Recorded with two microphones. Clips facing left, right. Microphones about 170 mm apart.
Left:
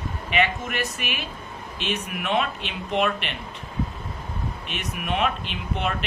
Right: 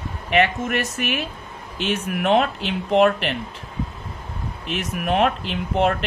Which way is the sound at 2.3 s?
90° right.